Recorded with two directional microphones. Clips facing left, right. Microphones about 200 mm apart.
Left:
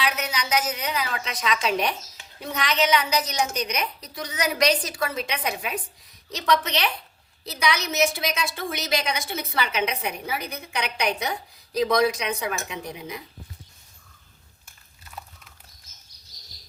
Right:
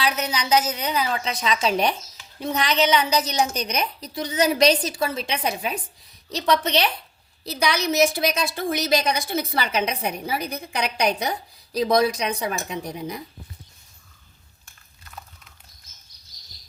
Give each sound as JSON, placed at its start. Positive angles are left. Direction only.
{"t": 0.0, "sound": "a woman's voice", "side_deg": -30}